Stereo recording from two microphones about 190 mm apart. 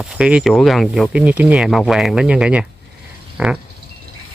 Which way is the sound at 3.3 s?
5° right (ahead or behind).